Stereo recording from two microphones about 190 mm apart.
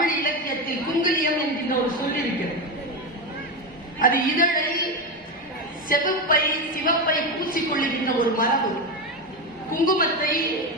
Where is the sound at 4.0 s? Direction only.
45° left (ahead or behind).